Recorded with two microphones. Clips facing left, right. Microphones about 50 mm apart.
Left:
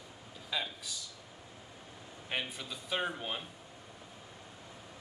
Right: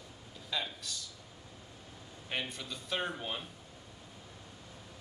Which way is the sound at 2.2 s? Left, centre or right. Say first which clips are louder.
Even; centre.